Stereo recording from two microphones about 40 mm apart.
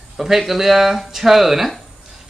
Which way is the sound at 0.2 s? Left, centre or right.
Centre.